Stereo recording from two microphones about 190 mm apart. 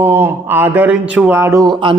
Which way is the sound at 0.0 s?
10° right (ahead or behind).